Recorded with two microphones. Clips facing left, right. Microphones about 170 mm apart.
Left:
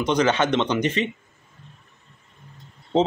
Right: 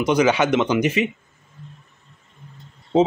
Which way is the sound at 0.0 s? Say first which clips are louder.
Right 3 dB; 10° right (ahead or behind).